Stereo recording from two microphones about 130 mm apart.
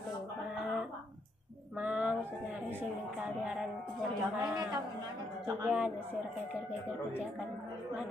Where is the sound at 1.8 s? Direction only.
10° right (ahead or behind).